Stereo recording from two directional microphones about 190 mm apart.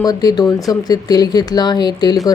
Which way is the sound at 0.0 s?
20° left (ahead or behind).